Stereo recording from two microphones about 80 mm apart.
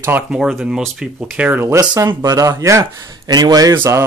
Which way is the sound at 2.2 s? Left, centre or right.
Right.